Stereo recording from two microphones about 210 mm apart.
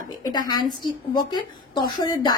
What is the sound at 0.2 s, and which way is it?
A woman's voice, 20° left (ahead or behind).